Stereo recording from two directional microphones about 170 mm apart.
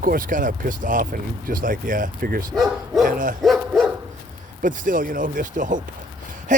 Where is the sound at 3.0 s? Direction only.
55° right (ahead or behind).